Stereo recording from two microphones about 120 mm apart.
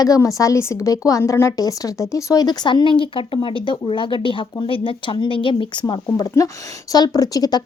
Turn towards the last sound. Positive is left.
turn(degrees=30)  # may be behind; listen again after turning